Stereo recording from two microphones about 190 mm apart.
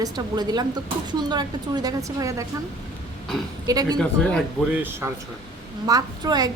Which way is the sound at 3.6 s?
20° right (ahead or behind).